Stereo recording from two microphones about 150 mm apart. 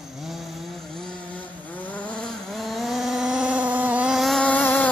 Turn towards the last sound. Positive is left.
turn(degrees=10)  # may be behind; listen again after turning